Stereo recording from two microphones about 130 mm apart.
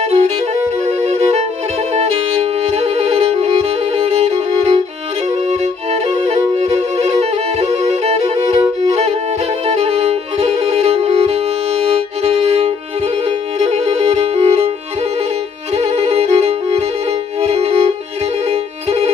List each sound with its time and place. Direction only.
0.0 s saxophone: 55° right (ahead or behind)
0.8 s music: 55° right (ahead or behind)
5.5 s violin: 60° right (ahead or behind)
9.7 s music: 50° right (ahead or behind)
15.7 s violin: 50° right (ahead or behind)
18.5 s music: 55° right (ahead or behind)